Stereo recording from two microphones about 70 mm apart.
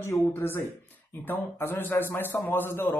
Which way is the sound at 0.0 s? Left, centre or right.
Left.